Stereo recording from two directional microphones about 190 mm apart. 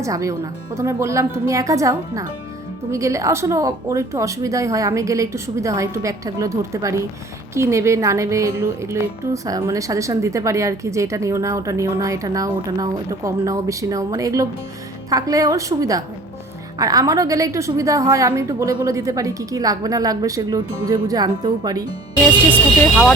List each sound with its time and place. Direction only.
0.0 s a woman's voice: 15° right (ahead or behind)
22.5 s speech: centre (ahead or behind)